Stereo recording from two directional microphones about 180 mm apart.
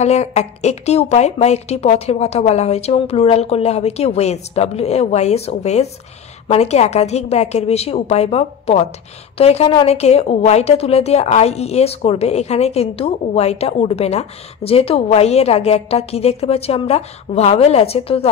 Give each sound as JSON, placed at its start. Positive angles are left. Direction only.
{"t": 0.0, "sound": "a woman's voice", "side_deg": 40}